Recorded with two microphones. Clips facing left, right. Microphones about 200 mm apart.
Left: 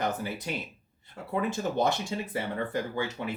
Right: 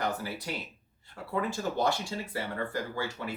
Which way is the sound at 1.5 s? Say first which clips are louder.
Left 2 dB; 20° left (ahead or behind).